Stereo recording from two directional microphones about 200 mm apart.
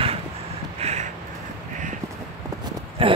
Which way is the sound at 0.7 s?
35° right (ahead or behind).